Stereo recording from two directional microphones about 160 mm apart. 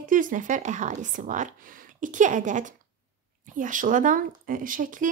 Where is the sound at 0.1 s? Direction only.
55° right (ahead or behind).